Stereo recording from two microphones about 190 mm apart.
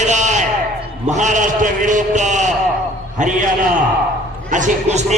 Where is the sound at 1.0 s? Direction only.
40° right (ahead or behind).